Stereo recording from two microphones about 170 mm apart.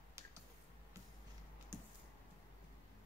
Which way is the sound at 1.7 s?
15° right (ahead or behind).